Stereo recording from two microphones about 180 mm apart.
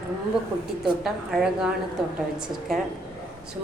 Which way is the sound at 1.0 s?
5° right (ahead or behind).